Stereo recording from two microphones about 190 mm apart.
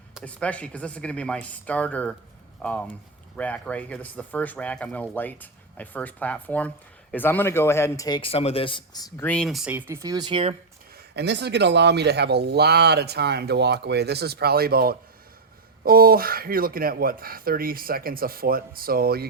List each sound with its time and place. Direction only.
0.1 s a man's voice: 5° left (ahead or behind); by 10.5 s 25° right (ahead or behind)
11.1 s speech: 60° right (ahead or behind)